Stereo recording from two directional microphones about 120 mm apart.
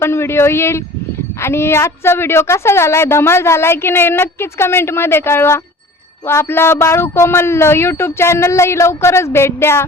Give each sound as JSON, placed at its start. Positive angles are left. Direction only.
{"t": 0.0, "sound": "a woman's voice", "side_deg": 20}